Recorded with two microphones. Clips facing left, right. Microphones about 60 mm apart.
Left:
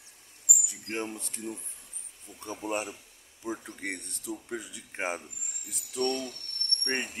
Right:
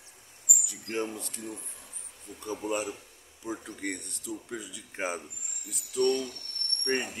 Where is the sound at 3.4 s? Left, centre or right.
Centre.